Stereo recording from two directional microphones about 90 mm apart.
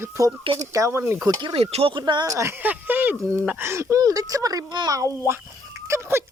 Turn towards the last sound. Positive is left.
turn(degrees=-30)  # may be behind; listen again after turning